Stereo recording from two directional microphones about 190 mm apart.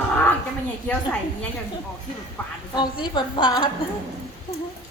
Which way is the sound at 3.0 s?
25° left (ahead or behind).